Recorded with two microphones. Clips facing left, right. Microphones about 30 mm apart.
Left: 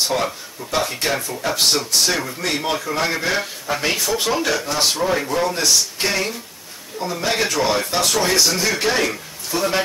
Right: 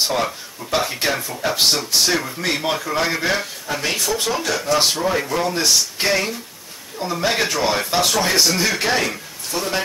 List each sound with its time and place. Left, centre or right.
0.7 s speech: centre
3.3 s speech: centre
5.5 s speech: centre